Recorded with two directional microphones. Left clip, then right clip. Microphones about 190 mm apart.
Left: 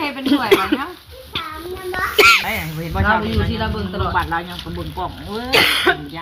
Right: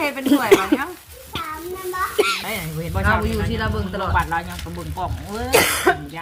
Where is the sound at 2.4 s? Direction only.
55° right (ahead or behind).